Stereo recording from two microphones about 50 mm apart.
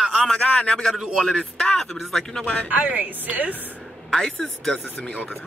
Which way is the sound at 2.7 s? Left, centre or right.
Right.